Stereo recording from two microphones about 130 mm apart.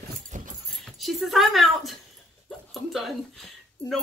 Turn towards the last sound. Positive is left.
turn(degrees=0)  # may be behind; listen again after turning